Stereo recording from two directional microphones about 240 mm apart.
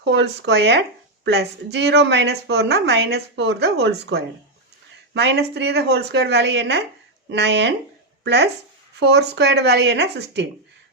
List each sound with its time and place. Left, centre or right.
0.0 s speech: right
5.1 s speech: right